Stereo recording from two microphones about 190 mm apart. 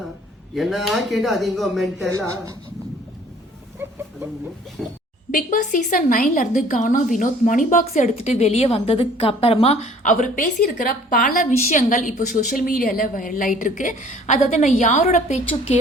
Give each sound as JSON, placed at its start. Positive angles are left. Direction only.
{"t": 0.5, "sound": "speech", "side_deg": 0}
{"t": 2.0, "sound": "speech", "side_deg": -15}
{"t": 4.8, "sound": "speech", "side_deg": 0}
{"t": 5.3, "sound": "a woman's voice", "side_deg": 45}